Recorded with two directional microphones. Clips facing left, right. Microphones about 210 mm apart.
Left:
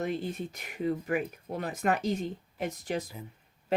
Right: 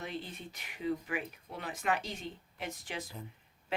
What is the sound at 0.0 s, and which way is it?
Speech, 45° left (ahead or behind).